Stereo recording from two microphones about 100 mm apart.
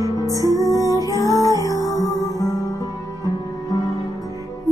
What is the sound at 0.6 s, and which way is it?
Music, 35° left (ahead or behind).